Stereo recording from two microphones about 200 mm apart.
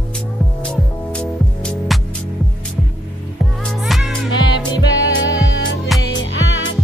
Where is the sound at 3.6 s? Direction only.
Centre (ahead or behind).